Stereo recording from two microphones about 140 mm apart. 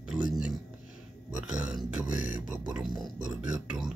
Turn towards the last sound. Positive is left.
turn(degrees=-5)  # may be behind; listen again after turning